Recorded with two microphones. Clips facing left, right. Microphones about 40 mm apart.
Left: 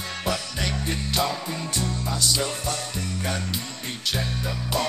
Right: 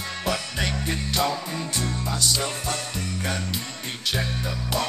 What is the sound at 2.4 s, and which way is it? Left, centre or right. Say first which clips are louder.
Music: even; right.